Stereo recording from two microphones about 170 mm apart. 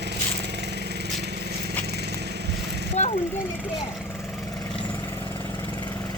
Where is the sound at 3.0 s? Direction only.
45° left (ahead or behind).